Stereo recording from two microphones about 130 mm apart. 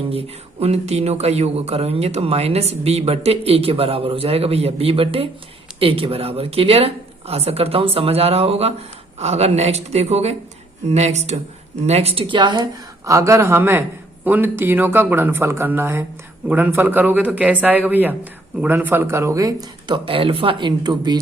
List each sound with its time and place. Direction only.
0.1 s speech: 50° right (ahead or behind)
13.1 s speech: 25° right (ahead or behind)
20.1 s speech: 45° right (ahead or behind)